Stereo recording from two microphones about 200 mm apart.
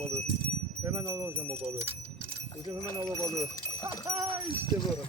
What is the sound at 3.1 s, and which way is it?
Speech, 20° left (ahead or behind).